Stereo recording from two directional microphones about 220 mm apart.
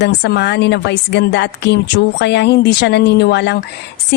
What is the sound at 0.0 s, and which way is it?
Speech, 50° left (ahead or behind).